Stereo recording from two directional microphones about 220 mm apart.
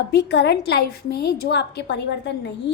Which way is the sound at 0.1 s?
50° left (ahead or behind).